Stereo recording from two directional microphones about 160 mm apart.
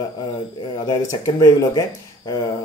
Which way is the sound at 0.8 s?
20° left (ahead or behind).